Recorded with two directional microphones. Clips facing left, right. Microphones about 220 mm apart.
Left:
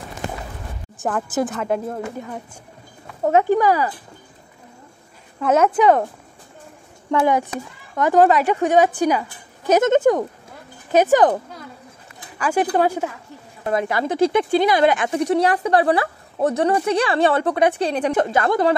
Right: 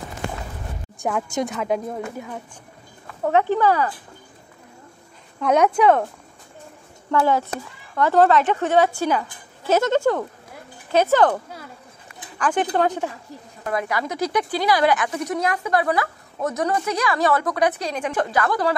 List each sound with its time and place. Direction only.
0.9 s a woman's voice: centre (ahead or behind)
3.4 s a woman's voice: 10° left (ahead or behind)
5.4 s a woman's voice: 5° left (ahead or behind)
7.1 s a woman's voice: 15° left (ahead or behind)
13.7 s speech: 25° left (ahead or behind)